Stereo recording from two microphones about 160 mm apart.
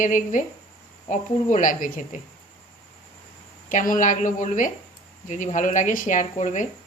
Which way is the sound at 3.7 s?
55° left (ahead or behind).